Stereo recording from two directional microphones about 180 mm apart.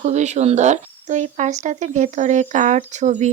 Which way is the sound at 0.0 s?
40° right (ahead or behind).